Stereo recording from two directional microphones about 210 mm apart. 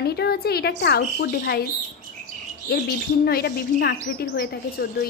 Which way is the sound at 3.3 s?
45° left (ahead or behind).